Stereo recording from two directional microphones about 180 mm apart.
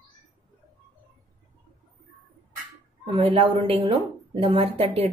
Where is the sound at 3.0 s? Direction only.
30° right (ahead or behind).